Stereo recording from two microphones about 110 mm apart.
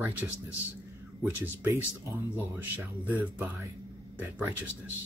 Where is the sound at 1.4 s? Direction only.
20° right (ahead or behind).